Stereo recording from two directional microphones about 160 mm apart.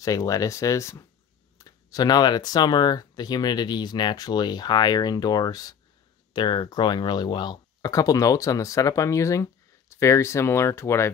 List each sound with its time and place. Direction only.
0.0 s speech: 20° left (ahead or behind)